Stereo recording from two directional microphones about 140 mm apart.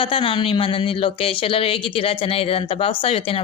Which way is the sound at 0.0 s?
40° left (ahead or behind).